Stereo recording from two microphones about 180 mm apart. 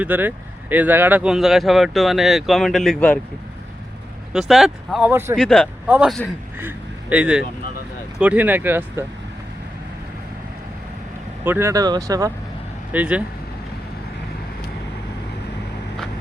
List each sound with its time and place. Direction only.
0.0 s speech: 10° right (ahead or behind)
4.3 s speech: centre (ahead or behind)
5.4 s speech: 5° left (ahead or behind)
5.9 s speech: 5° right (ahead or behind)
11.4 s speech: 15° right (ahead or behind)
12.9 s speech: 10° right (ahead or behind)